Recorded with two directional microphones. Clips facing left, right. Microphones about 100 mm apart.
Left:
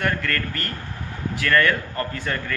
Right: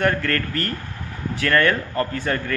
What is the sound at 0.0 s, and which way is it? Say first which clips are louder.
A man's voice: right 4 dB; 35° right (ahead or behind).